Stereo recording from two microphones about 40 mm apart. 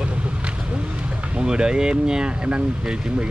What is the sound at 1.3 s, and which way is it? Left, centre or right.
Speech, right.